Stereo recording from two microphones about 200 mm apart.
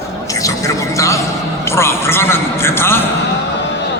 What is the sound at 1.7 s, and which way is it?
Music, 15° left (ahead or behind).